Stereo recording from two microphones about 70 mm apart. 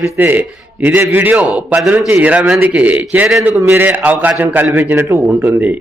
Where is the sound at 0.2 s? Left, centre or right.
Right.